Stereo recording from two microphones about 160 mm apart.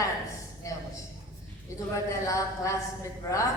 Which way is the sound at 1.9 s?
20° left (ahead or behind).